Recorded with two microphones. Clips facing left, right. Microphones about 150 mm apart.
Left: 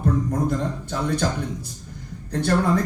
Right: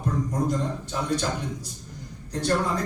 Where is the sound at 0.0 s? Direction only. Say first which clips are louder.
Left 4 dB; 60° left (ahead or behind).